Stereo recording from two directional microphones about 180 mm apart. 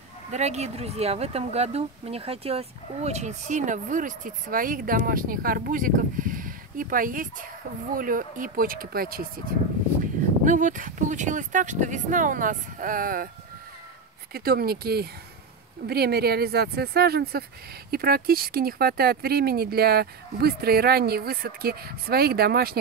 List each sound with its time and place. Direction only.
0.3 s speech: 40° right (ahead or behind); by 9.3 s 55° right (ahead or behind)
10.4 s speech: 45° right (ahead or behind)
14.3 s speech: 60° right (ahead or behind)